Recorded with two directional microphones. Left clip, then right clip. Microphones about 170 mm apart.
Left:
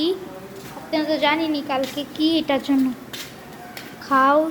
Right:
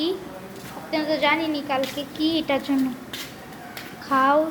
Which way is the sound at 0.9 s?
25° left (ahead or behind).